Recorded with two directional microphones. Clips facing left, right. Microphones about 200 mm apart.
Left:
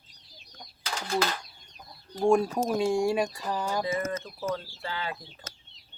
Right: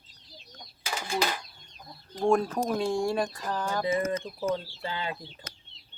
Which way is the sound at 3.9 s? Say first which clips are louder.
Right 3 dB; 15° right (ahead or behind).